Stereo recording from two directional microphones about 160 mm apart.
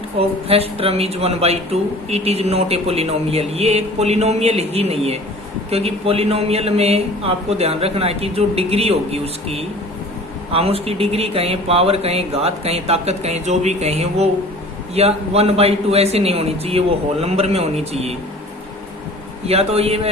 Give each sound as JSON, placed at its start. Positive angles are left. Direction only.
{"t": 0.2, "sound": "speech", "side_deg": -40}
{"t": 19.5, "sound": "speech", "side_deg": -40}